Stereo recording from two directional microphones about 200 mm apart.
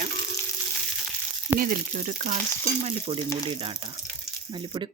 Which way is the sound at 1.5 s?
45° right (ahead or behind).